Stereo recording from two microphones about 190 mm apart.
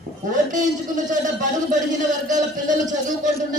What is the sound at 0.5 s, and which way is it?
A man's voice, 40° right (ahead or behind).